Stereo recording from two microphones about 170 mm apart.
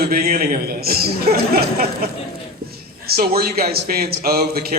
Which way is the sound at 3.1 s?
65° right (ahead or behind).